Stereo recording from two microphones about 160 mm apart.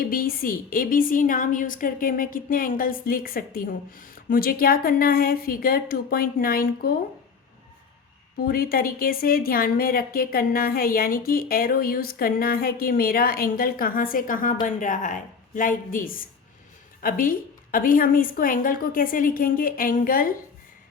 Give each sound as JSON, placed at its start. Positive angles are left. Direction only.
{"t": 0.0, "sound": "a woman's voice", "side_deg": 65}
{"t": 8.4, "sound": "a woman's voice", "side_deg": 65}